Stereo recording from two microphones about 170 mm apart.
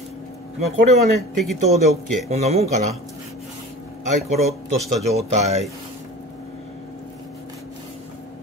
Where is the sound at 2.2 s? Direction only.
40° right (ahead or behind).